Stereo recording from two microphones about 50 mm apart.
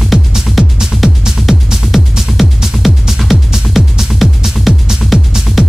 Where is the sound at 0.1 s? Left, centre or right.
Centre.